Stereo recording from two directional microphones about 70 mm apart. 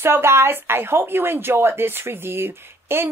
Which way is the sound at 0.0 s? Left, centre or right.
Right.